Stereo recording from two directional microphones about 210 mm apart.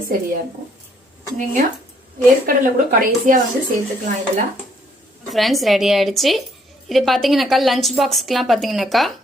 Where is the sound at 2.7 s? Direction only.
40° right (ahead or behind).